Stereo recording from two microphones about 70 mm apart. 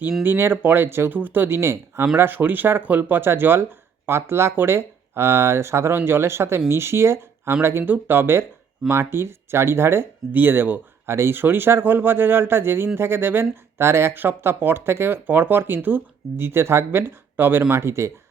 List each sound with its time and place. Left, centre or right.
0.2 s speech: right